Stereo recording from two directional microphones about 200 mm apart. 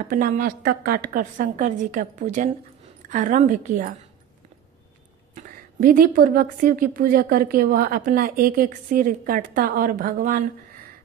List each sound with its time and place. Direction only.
0.1 s a woman's voice: 40° right (ahead or behind)
5.3 s speech: 45° right (ahead or behind)